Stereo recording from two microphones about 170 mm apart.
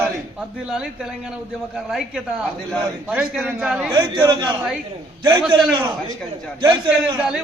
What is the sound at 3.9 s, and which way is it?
Speech, 25° right (ahead or behind).